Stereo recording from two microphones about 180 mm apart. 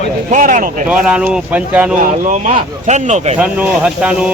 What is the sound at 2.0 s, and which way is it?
Speech, 45° right (ahead or behind).